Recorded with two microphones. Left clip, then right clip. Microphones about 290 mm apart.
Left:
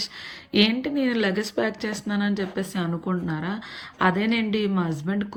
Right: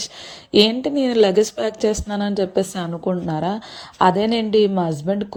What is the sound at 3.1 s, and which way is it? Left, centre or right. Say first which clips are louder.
Speech: right 6 dB; right.